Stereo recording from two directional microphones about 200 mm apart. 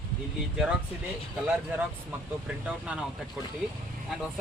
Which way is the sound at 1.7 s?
10° right (ahead or behind).